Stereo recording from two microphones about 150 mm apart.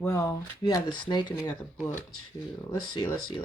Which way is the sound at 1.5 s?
15° left (ahead or behind).